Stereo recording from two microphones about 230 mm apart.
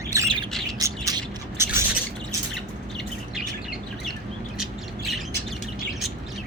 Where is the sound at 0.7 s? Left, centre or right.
Centre.